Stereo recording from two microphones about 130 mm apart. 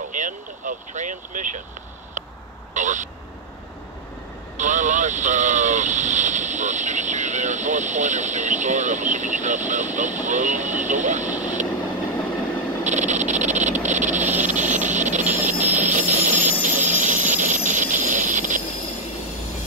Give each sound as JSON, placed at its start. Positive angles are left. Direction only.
{"t": 0.1, "sound": "speech", "side_deg": -75}
{"t": 2.7, "sound": "speech", "side_deg": -70}
{"t": 4.6, "sound": "speech", "side_deg": -70}
{"t": 11.2, "sound": "vehicle", "side_deg": -10}
{"t": 12.8, "sound": "frog", "side_deg": -65}
{"t": 13.8, "sound": "a sound", "side_deg": -65}
{"t": 14.4, "sound": "vehicle", "side_deg": -70}
{"t": 16.6, "sound": "a sound", "side_deg": -75}
{"t": 17.3, "sound": "train", "side_deg": -70}